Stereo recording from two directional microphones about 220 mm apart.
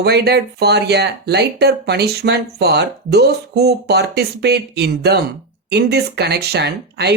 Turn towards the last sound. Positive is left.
turn(degrees=-50)  # may be behind; listen again after turning